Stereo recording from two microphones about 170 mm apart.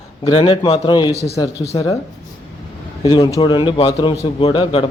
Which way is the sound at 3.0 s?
30° left (ahead or behind).